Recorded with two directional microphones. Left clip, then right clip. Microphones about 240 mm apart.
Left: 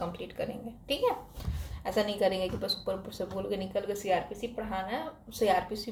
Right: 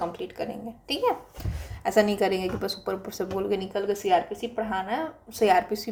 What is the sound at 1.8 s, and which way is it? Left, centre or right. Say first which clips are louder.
A woman's voice: right 6 dB; right.